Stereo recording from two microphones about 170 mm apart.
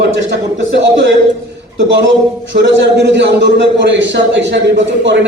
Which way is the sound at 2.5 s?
90° right.